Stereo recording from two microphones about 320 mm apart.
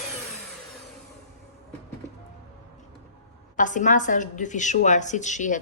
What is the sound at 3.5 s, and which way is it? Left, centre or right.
A woman's voice, left.